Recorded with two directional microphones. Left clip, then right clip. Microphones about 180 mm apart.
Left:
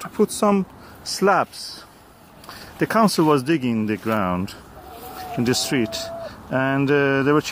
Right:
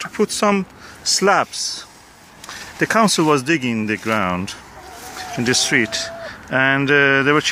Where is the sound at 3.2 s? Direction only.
5° right (ahead or behind).